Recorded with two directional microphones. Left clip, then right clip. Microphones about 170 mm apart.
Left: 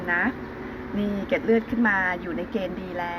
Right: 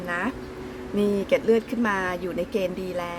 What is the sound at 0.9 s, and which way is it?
A woman's voice, 60° right (ahead or behind).